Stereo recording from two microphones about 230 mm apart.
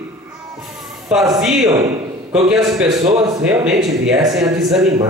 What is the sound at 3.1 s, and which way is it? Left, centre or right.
Speech, centre.